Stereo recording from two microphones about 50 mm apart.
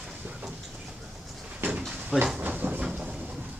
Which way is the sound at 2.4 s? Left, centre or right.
Right.